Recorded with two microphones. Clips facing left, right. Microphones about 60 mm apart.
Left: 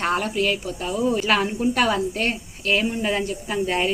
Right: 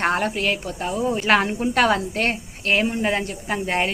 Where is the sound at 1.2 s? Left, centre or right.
Right.